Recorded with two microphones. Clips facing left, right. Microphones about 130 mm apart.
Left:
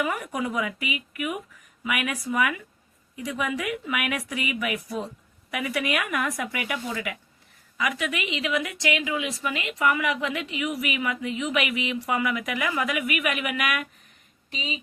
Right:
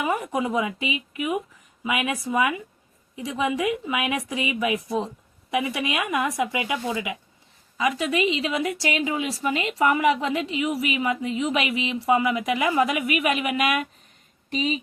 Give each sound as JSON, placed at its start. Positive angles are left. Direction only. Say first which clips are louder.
{"t": 0.0, "sound": "speech", "louder": "right 3 dB", "side_deg": -25}
{"t": 7.8, "sound": "a woman's voice", "louder": "right 5 dB", "side_deg": -30}